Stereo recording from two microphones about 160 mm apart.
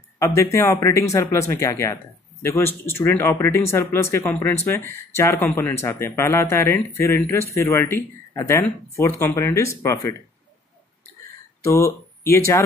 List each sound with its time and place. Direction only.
0.2 s speech: 20° left (ahead or behind)
11.6 s speech: 15° left (ahead or behind)